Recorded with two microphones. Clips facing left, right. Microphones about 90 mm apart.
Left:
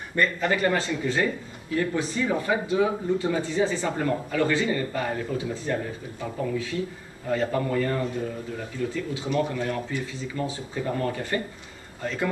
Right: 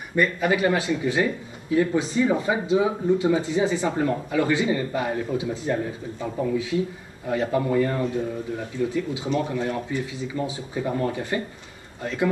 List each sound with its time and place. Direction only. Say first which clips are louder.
0.1 s speech: right 2 dB; 10° right (ahead or behind)